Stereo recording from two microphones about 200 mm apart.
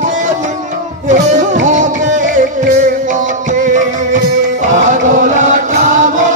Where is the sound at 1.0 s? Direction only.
35° right (ahead or behind).